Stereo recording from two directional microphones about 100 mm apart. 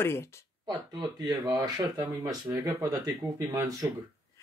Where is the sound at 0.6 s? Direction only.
45° right (ahead or behind).